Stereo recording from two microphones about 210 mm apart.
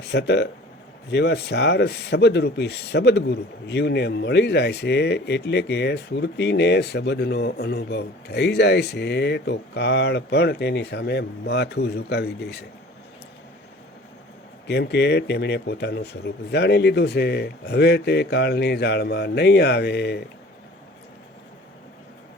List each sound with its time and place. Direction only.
0.0 s speech: 55° left (ahead or behind)
14.7 s speech: 50° left (ahead or behind)